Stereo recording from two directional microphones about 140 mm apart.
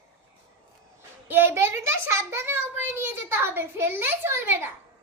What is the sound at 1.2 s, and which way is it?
A child's voice, 15° right (ahead or behind).